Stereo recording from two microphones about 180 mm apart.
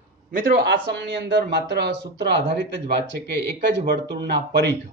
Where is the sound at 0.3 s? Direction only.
55° right (ahead or behind).